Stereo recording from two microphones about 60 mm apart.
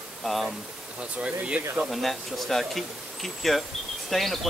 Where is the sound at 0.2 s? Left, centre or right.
Centre.